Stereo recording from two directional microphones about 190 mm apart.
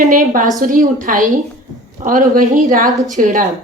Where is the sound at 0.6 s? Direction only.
45° right (ahead or behind).